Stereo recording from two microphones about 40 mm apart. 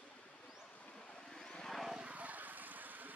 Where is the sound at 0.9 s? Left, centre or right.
Centre.